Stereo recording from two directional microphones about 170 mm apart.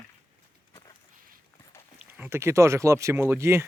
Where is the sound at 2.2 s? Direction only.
15° right (ahead or behind).